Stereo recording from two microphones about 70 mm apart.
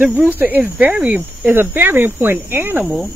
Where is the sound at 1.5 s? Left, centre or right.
Right.